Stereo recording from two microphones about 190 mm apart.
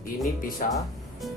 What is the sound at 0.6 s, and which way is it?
Speech, 45° left (ahead or behind).